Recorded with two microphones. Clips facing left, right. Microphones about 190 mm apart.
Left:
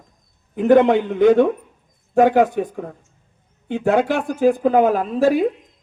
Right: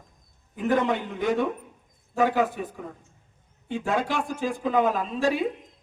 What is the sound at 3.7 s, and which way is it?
A man's voice, 60° left (ahead or behind).